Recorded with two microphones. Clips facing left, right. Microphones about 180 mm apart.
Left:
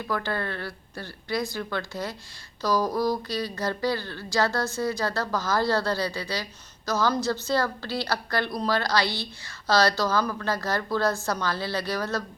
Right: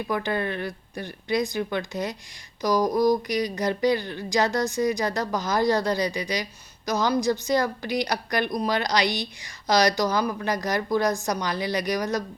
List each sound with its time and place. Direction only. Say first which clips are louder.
0.1 s a woman's voice: right 2 dB; 20° right (ahead or behind)